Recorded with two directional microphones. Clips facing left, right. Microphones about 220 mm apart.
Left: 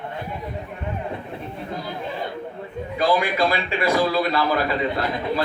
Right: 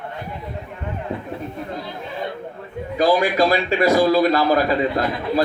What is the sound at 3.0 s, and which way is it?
Speech, 40° right (ahead or behind).